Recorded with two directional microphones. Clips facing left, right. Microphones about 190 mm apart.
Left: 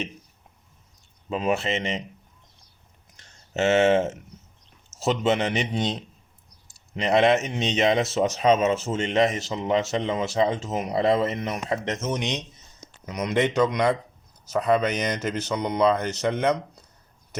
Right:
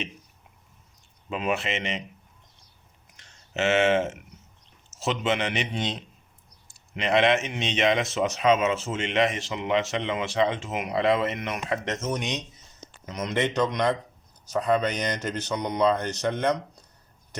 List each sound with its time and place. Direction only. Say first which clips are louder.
1.3 s speech: left 3 dB; 35° left (ahead or behind)
3.5 s speech: left 3 dB; 40° left (ahead or behind)
6.9 s speech: left 2 dB; 40° left (ahead or behind)
13.1 s speech: left 3 dB; 15° left (ahead or behind)